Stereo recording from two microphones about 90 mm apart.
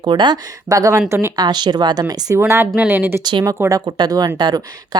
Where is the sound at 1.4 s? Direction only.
50° right (ahead or behind).